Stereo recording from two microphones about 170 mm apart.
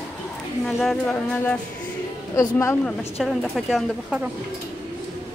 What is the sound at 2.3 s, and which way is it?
Speech, 15° left (ahead or behind).